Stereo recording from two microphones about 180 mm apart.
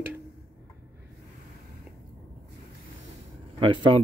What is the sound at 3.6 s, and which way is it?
Speech, 25° right (ahead or behind).